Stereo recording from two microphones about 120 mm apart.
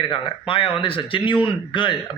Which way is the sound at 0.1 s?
45° left (ahead or behind).